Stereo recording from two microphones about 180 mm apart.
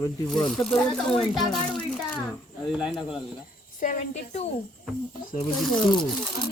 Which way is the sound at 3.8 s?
45° left (ahead or behind).